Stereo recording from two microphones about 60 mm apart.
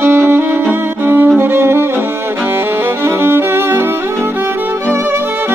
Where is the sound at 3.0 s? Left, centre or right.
Right.